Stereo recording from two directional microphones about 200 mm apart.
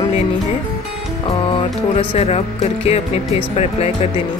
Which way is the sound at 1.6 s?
30° left (ahead or behind).